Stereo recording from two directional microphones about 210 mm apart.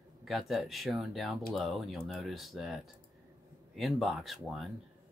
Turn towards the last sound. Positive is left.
turn(degrees=0)  # may be behind; listen again after turning